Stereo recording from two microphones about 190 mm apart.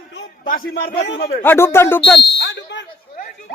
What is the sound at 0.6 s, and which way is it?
Speech, 65° left (ahead or behind).